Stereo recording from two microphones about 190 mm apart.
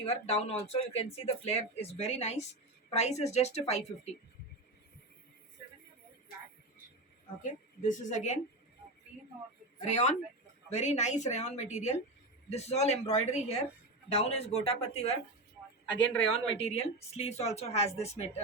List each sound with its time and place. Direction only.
0.1 s a woman's voice: 35° left (ahead or behind)
7.8 s a woman's voice: 40° left (ahead or behind)
9.8 s a woman's voice: 40° left (ahead or behind)
16.3 s a woman's voice: 35° left (ahead or behind)